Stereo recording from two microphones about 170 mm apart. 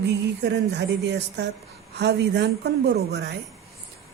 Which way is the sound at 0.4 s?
90° right.